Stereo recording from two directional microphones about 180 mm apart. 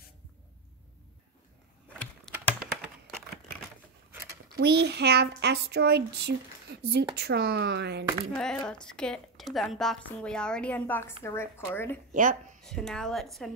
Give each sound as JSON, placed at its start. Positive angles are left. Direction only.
{"t": 2.3, "sound": "typing", "side_deg": 0}
{"t": 2.8, "sound": "crumpling", "side_deg": 5}
{"t": 4.6, "sound": "a child's voice", "side_deg": -65}
{"t": 8.6, "sound": "a woman's voice", "side_deg": 5}
{"t": 12.1, "sound": "a sound", "side_deg": -45}
{"t": 12.6, "sound": "a woman's voice", "side_deg": 0}